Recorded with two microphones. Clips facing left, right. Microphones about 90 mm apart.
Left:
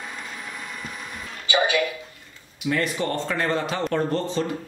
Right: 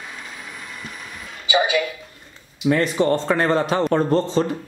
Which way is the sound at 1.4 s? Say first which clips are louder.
Right 2 dB; 10° right (ahead or behind).